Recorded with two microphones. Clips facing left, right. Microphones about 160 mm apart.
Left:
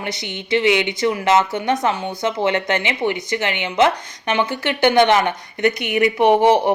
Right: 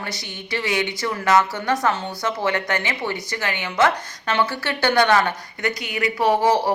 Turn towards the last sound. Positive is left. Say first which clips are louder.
# left 4 dB
turn(degrees=20)  # may be behind; listen again after turning